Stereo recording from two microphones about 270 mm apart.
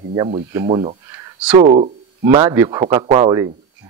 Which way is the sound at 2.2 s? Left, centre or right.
Centre.